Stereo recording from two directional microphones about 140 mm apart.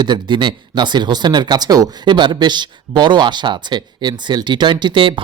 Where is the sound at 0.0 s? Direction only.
35° right (ahead or behind).